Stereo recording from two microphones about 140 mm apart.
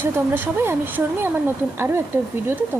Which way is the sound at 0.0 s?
15° right (ahead or behind).